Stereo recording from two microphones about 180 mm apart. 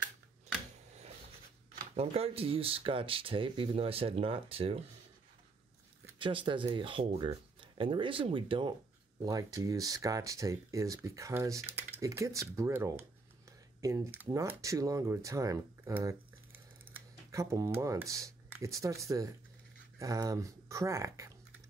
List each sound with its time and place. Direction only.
2.0 s speech: 30° right (ahead or behind)
6.1 s speech: 30° right (ahead or behind)